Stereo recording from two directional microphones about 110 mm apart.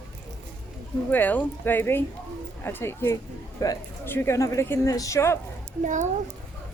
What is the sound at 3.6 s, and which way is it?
Speech, 30° left (ahead or behind).